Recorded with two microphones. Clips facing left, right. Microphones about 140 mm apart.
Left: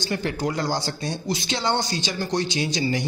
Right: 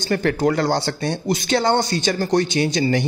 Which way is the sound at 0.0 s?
60° right (ahead or behind).